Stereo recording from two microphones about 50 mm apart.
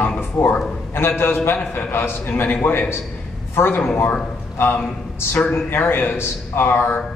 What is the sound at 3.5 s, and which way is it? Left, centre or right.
A man's voice, left.